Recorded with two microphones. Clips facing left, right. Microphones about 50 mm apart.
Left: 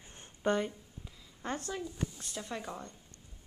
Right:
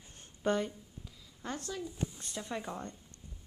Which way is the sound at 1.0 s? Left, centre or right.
Left.